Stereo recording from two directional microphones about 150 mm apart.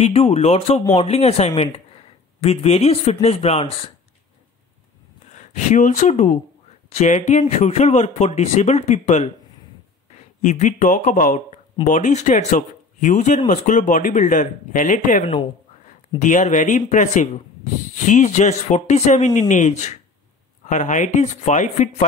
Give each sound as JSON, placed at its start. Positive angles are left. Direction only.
{"t": 0.0, "sound": "speech", "side_deg": 40}
{"t": 5.3, "sound": "speech", "side_deg": 55}